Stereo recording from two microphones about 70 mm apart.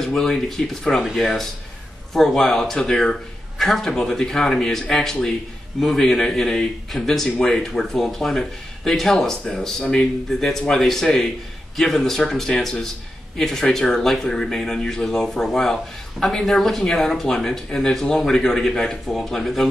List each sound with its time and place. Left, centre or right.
0.0 s a man's voice: centre